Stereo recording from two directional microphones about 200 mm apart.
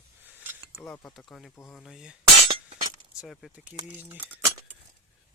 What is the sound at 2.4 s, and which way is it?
Glass, 30° right (ahead or behind).